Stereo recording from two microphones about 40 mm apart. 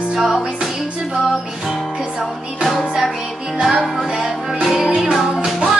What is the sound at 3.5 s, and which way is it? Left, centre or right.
Music, right.